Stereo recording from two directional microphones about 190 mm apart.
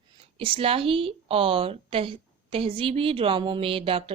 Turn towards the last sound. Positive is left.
turn(degrees=-30)  # may be behind; listen again after turning